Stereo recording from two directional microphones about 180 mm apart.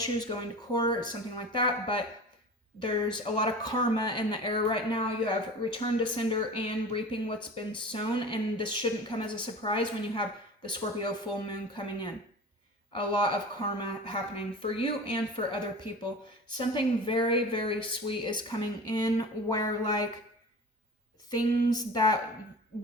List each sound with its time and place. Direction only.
0.0 s speech: 20° left (ahead or behind)
16.6 s speech: 25° left (ahead or behind)
21.2 s speech: 20° left (ahead or behind)